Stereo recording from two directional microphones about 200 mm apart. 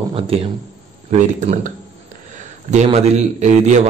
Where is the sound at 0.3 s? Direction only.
30° right (ahead or behind).